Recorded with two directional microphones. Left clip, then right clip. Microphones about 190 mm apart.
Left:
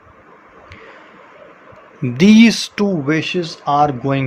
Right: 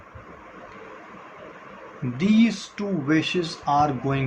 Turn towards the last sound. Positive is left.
turn(degrees=55)  # may be behind; listen again after turning